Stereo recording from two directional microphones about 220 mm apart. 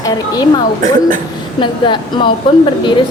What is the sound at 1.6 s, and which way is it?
Speech, 20° left (ahead or behind).